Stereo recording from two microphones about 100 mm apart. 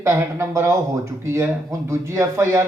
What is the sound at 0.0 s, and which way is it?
Speech, 25° right (ahead or behind).